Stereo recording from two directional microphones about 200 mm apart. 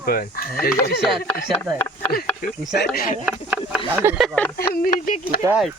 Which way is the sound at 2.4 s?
45° left (ahead or behind).